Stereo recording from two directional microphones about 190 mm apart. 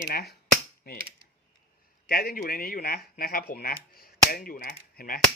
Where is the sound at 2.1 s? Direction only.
55° left (ahead or behind).